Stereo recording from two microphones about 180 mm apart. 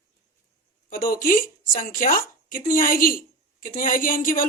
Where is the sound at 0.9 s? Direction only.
50° left (ahead or behind).